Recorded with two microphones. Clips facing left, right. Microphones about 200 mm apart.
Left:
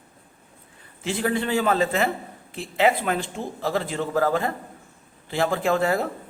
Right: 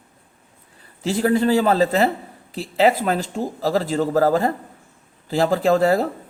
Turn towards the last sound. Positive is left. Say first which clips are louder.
# right 5 dB
turn(degrees=-35)  # may be behind; listen again after turning